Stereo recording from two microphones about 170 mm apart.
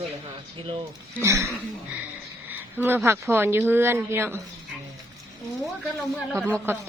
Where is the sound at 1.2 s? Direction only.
15° right (ahead or behind).